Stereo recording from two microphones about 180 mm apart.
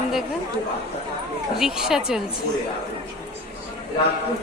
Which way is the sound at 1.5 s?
5° right (ahead or behind).